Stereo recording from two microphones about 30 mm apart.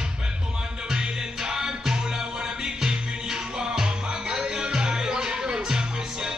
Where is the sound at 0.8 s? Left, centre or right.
Right.